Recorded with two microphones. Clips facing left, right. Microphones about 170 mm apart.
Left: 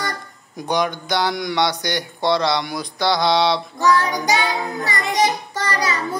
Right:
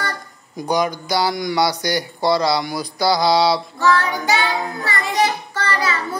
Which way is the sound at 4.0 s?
20° left (ahead or behind).